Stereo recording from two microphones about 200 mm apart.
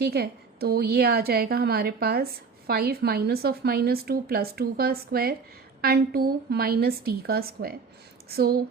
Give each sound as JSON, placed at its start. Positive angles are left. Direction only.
{"t": 0.0, "sound": "a woman's voice", "side_deg": -50}